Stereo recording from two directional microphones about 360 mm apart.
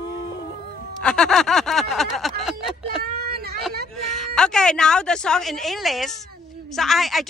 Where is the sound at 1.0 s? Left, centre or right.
Centre.